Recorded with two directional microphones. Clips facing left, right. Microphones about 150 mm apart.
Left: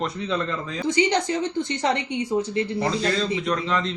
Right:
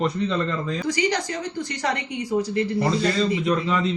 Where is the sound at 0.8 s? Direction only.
25° left (ahead or behind).